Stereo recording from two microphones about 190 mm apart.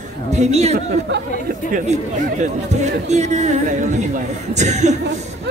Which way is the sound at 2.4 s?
40° right (ahead or behind).